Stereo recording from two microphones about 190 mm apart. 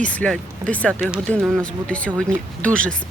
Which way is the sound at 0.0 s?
5° left (ahead or behind).